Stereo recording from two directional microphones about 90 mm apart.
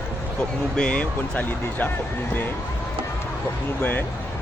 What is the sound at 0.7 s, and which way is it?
Speech, 10° left (ahead or behind).